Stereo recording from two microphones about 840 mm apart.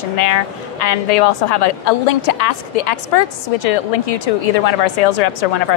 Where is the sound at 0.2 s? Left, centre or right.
Left.